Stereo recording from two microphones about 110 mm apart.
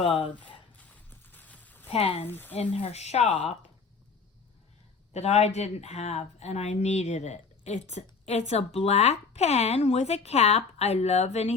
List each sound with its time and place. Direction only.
0.0 s speech: 55° left (ahead or behind)
0.9 s clip-clop: 15° left (ahead or behind)
1.9 s speech: 65° left (ahead or behind)
2.2 s speech: 15° left (ahead or behind)
2.6 s speech: 80° left
5.1 s speech: 85° left